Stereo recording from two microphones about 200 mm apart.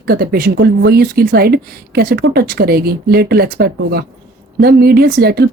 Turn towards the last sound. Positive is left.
turn(degrees=-50)  # may be behind; listen again after turning